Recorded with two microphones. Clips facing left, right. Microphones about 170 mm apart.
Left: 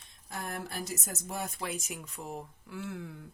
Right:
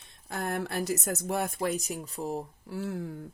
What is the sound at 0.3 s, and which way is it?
A woman's voice, 75° right (ahead or behind).